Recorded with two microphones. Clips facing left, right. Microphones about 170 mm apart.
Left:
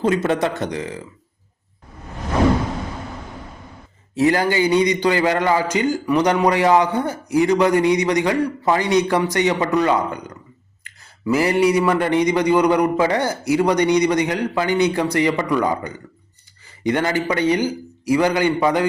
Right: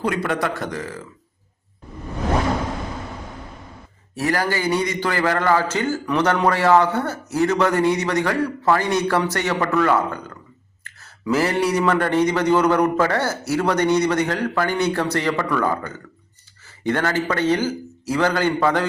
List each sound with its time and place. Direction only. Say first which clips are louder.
0.0 s speech: left 4 dB; 25° left (ahead or behind)
4.1 s a man's voice: left 5 dB; 20° left (ahead or behind)